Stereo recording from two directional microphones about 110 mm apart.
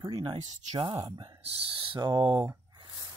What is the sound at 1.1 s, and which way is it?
Speech, 40° right (ahead or behind).